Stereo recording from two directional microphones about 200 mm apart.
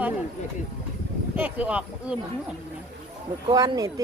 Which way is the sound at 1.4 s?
5° right (ahead or behind).